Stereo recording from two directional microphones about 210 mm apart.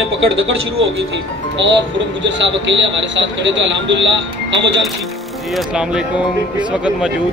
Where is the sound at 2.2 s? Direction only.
60° right (ahead or behind).